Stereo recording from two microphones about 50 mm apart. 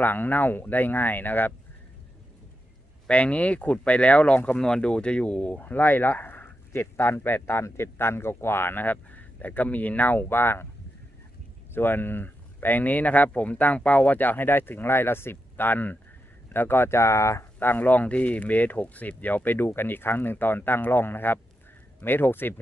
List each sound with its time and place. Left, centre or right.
0.0 s speech: left
3.1 s speech: left
4.6 s speech: centre
5.6 s speech: left
7.6 s speech: left
11.7 s speech: left
16.5 s speech: left
17.0 s speech: left
17.6 s speech: left